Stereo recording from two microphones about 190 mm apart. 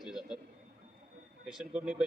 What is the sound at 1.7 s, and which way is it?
Speech, 5° right (ahead or behind).